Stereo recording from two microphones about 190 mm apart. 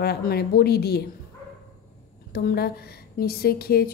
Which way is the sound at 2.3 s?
55° left (ahead or behind).